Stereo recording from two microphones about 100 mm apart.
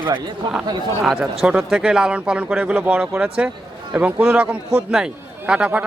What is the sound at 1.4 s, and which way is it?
Speech, 5° right (ahead or behind).